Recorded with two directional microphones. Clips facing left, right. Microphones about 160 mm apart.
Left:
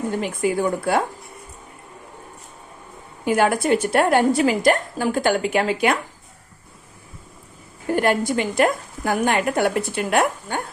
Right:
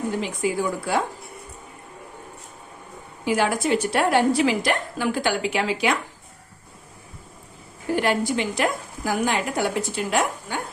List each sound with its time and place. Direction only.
0.2 s a woman's voice: 55° left (ahead or behind)
3.2 s a woman's voice: 50° left (ahead or behind)
7.9 s a woman's voice: 50° left (ahead or behind)